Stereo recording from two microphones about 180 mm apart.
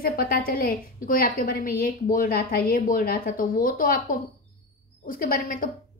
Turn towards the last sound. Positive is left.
turn(degrees=50)  # may be behind; listen again after turning